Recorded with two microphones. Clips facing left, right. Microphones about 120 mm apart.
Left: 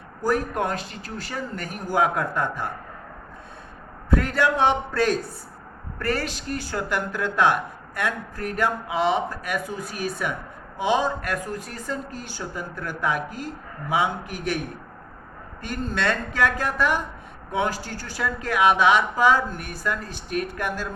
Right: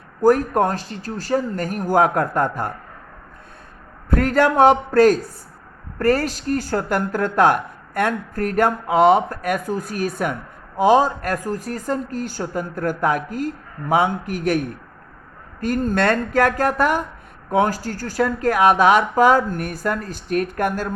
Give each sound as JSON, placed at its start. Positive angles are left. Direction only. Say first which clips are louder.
{"t": 0.2, "sound": "speech", "louder": "right 8 dB", "side_deg": -45}
{"t": 4.1, "sound": "speech", "louder": "right 5 dB", "side_deg": -45}
{"t": 15.6, "sound": "speech", "louder": "right 7 dB", "side_deg": -45}